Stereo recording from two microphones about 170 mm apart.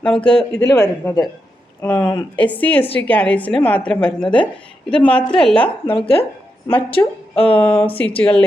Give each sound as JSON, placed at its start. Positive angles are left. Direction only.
{"t": 0.0, "sound": "a woman's voice", "side_deg": 5}
{"t": 0.7, "sound": "a woman's voice", "side_deg": 15}
{"t": 5.9, "sound": "a woman's voice", "side_deg": 30}
{"t": 7.5, "sound": "a woman's voice", "side_deg": 5}